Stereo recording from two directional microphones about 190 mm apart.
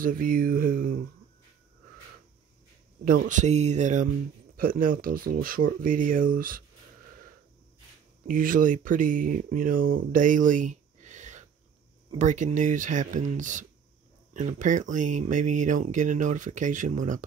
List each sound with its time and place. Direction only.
0.0 s speech: 50° right (ahead or behind)
3.3 s speech: 40° right (ahead or behind)
8.3 s speech: 45° right (ahead or behind)
10.1 s a sound: 45° right (ahead or behind)
12.2 s speech: 40° right (ahead or behind)